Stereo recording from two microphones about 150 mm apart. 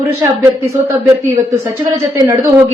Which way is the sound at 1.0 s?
25° right (ahead or behind).